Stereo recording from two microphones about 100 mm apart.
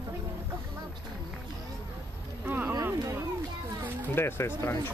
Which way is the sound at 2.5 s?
15° right (ahead or behind).